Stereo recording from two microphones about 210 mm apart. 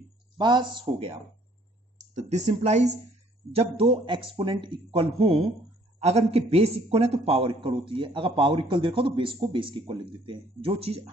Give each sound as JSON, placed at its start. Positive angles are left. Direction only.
{"t": 0.4, "sound": "a man's voice", "side_deg": -20}
{"t": 2.1, "sound": "a man's voice", "side_deg": -35}